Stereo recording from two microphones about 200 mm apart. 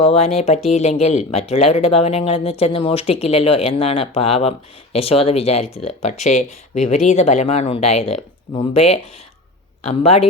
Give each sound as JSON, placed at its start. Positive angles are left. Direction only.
{"t": 0.0, "sound": "speech", "side_deg": 30}